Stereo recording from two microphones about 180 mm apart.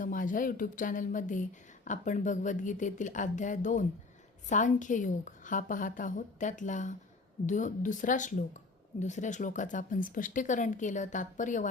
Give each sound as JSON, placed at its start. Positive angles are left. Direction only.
{"t": 0.0, "sound": "speech", "side_deg": 50}